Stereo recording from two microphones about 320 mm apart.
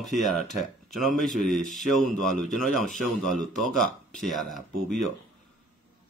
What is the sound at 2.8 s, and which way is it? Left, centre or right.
Speech, left.